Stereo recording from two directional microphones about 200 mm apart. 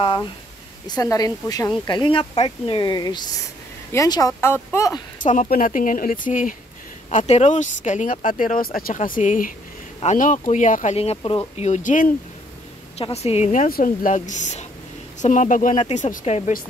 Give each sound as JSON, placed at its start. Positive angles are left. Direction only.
{"t": 0.8, "sound": "speech", "side_deg": 20}
{"t": 5.2, "sound": "speech", "side_deg": 40}